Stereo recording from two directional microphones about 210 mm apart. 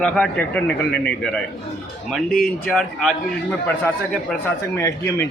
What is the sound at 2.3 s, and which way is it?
Speech, centre (ahead or behind).